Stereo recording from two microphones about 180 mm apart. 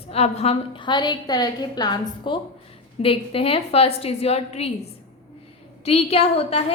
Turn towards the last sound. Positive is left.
turn(degrees=35)  # may be behind; listen again after turning